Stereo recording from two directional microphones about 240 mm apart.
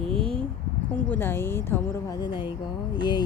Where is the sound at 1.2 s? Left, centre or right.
Centre.